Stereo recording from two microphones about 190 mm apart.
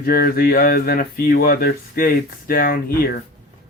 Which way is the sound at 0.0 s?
50° left (ahead or behind).